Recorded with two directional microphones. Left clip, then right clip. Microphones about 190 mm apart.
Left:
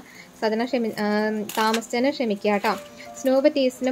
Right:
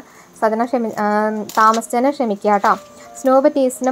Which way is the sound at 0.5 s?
10° right (ahead or behind).